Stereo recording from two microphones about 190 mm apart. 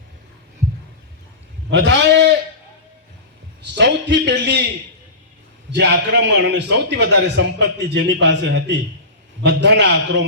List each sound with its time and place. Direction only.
1.7 s a man's voice: 70° right (ahead or behind)
3.6 s a man's voice: 65° right (ahead or behind)
5.7 s a man's voice: 65° right (ahead or behind)